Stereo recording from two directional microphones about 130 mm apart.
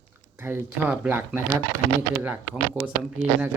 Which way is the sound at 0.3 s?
15° right (ahead or behind).